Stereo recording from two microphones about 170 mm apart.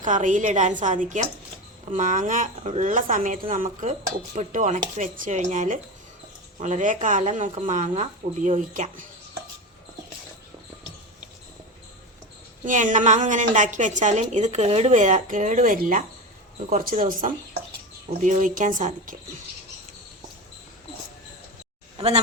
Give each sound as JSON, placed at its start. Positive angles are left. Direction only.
{"t": 0.0, "sound": "a woman's voice", "side_deg": -50}
{"t": 12.6, "sound": "a woman's voice", "side_deg": -50}
{"t": 21.9, "sound": "speech", "side_deg": -40}